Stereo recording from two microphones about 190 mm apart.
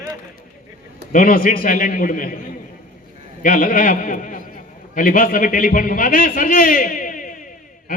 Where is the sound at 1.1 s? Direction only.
50° left (ahead or behind).